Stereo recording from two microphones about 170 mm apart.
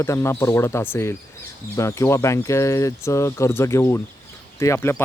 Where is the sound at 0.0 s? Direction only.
15° left (ahead or behind).